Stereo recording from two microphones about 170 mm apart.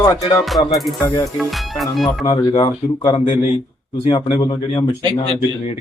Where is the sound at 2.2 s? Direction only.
30° left (ahead or behind).